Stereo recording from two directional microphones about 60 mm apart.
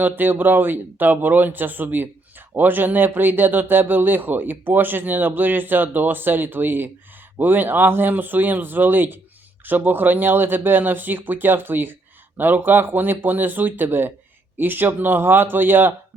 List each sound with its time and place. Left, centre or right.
0.0 s speech: right